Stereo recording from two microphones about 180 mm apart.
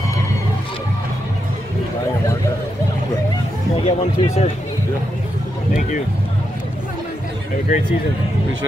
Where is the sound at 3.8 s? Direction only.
35° left (ahead or behind).